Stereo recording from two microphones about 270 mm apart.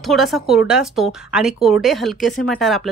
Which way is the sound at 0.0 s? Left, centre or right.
Centre.